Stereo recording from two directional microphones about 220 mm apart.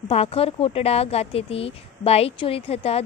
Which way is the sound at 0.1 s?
25° left (ahead or behind).